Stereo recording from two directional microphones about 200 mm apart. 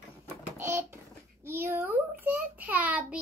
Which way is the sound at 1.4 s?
10° right (ahead or behind).